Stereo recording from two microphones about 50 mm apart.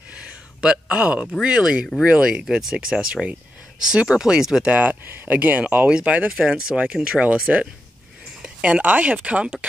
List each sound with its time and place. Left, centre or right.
0.6 s a man's voice: centre
4.6 s speech: right
5.0 s speech: right
5.3 s speech: right
5.9 s speech: right
8.4 s speech: right